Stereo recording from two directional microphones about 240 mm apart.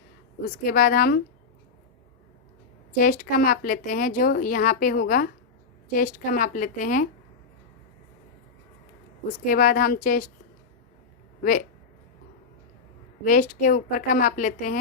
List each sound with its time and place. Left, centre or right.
0.6 s speech: left
2.9 s speech: left
9.5 s speech: left
13.2 s speech: left